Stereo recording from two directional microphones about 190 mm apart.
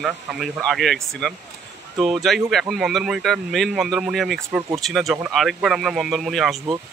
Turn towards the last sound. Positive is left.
turn(degrees=0)  # may be behind; listen again after turning